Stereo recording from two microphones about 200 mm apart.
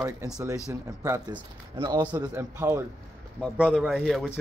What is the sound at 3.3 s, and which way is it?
Speech, 5° left (ahead or behind).